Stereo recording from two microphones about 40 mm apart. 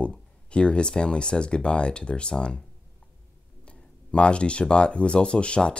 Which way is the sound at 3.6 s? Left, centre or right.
Left.